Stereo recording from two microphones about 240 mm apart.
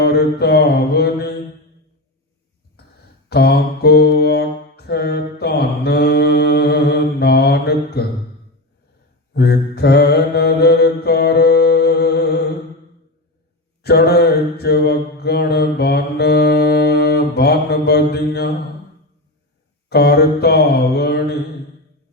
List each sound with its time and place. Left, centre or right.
0.0 s mantra: left
3.2 s mantra: left
9.3 s mantra: left
13.8 s mantra: left
19.9 s mantra: left